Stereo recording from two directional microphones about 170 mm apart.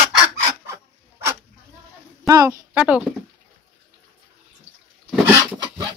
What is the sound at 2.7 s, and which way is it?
Speech, 5° right (ahead or behind).